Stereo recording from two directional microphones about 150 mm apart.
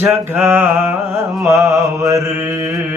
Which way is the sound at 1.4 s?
20° right (ahead or behind).